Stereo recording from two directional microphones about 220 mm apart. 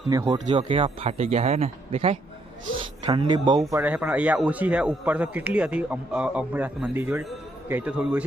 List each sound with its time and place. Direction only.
0.1 s a man's voice: 15° right (ahead or behind)